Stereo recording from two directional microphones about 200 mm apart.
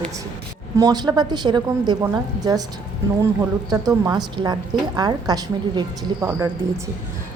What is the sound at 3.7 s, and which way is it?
A woman's voice, 20° right (ahead or behind).